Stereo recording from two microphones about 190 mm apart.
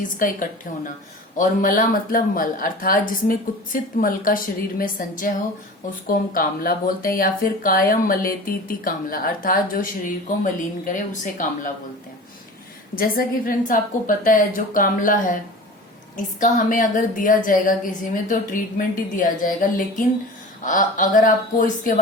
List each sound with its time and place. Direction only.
0.2 s speech: 45° left (ahead or behind)
13.0 s speech: 50° left (ahead or behind)
20.7 s speech: 45° left (ahead or behind)